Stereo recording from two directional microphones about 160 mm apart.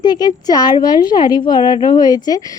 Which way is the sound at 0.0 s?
25° left (ahead or behind).